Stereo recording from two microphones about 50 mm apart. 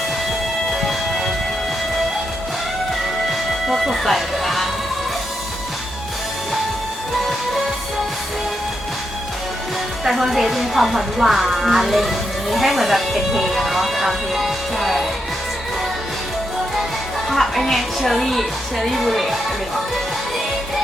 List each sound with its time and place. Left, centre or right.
0.7 s music: centre
3.7 s music: centre
10.0 s speech: centre
17.2 s speech: centre